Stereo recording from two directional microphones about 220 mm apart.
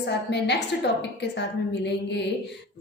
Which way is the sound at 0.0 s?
50° left (ahead or behind).